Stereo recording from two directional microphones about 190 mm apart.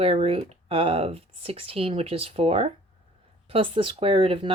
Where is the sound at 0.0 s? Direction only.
30° right (ahead or behind).